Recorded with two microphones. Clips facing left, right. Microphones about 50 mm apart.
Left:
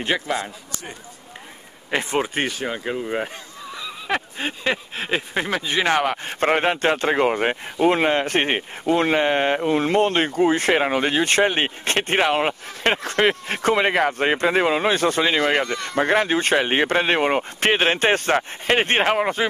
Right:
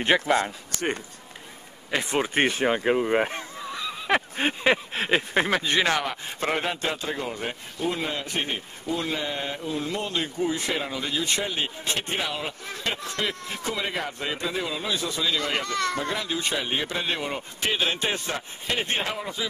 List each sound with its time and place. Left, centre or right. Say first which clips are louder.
0.1 s a sound: right 2 dB; centre
1.9 s speech: left 3 dB; left
2.3 s speech: right 2 dB; right
4.4 s a sound: right 2 dB; centre
5.5 s speech: left 4 dB; centre
5.9 s speech: left 7 dB; left
15.6 s speech: even; left
16.0 s speech: left 10 dB; left